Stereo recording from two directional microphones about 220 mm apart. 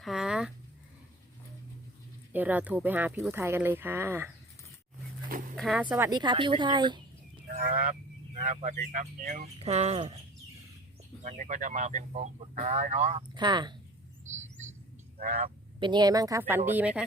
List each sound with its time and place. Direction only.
0.0 s a sound: centre (ahead or behind)
2.3 s speech: 10° right (ahead or behind)
5.5 s speech: centre (ahead or behind); by 7.0 s 20° right (ahead or behind)
8.4 s speech: 35° right (ahead or behind)
11.2 s speech: 35° right (ahead or behind); by 13.7 s 20° right (ahead or behind)
14.3 s bird: 30° right (ahead or behind)
15.2 s speech: 30° right (ahead or behind); by 17.0 s 5° right (ahead or behind)